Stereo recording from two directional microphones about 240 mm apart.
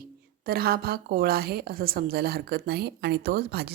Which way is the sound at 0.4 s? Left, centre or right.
Right.